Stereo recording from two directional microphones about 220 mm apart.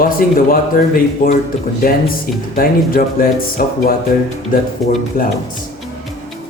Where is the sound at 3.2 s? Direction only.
40° left (ahead or behind).